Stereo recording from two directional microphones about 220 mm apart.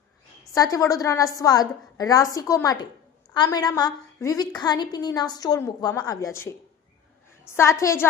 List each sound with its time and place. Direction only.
0.5 s a woman's voice: 15° left (ahead or behind)